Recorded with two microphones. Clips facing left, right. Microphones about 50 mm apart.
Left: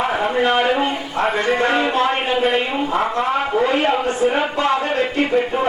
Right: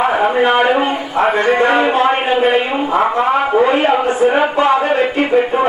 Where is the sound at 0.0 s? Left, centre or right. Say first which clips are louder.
Right 5 dB; centre.